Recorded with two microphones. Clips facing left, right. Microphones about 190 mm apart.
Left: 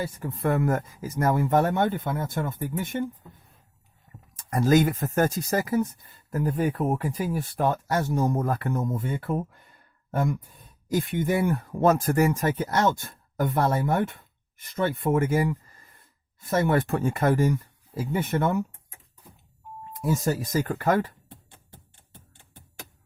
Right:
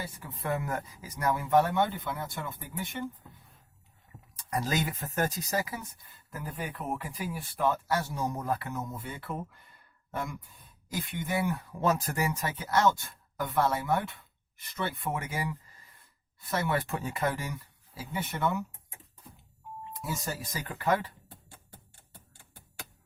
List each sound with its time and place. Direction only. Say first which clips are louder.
0.2 s speech: left 8 dB; 50° left (ahead or behind)
4.4 s speech: left 10 dB; 50° left (ahead or behind)
20.2 s speech: left 12 dB; 45° left (ahead or behind)